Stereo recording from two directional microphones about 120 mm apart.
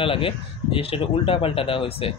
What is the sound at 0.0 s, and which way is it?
Speech, 50° left (ahead or behind).